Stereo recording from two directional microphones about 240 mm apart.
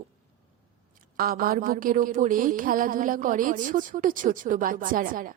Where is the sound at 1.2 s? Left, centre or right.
Right.